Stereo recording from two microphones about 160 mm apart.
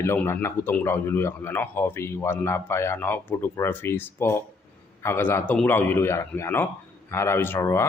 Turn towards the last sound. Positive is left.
turn(degrees=15)  # may be behind; listen again after turning